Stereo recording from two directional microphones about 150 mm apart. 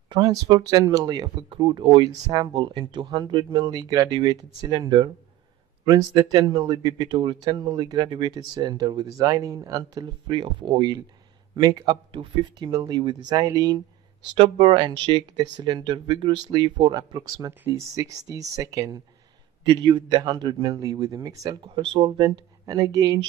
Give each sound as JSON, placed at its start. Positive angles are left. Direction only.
{"t": 0.1, "sound": "speech", "side_deg": -30}
{"t": 17.5, "sound": "speech", "side_deg": -20}